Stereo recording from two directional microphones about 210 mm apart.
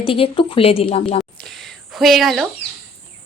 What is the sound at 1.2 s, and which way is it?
Speech, centre (ahead or behind).